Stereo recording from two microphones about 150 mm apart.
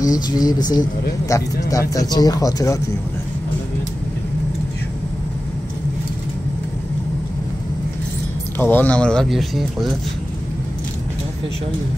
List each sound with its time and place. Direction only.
0.0 s speech: 25° left (ahead or behind)
8.5 s speech: 15° left (ahead or behind)